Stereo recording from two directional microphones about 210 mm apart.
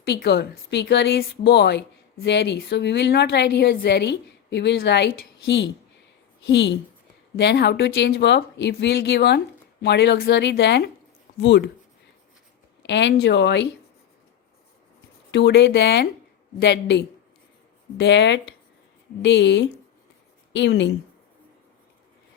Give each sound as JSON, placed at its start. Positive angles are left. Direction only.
{"t": 0.1, "sound": "a woman's voice", "side_deg": 50}
{"t": 12.8, "sound": "speech", "side_deg": 55}
{"t": 15.3, "sound": "speech", "side_deg": 55}